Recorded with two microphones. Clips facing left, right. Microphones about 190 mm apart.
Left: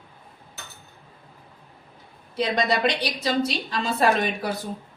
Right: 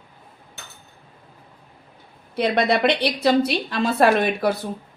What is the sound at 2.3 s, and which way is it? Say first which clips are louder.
A woman's voice: right 4 dB; 60° right (ahead or behind).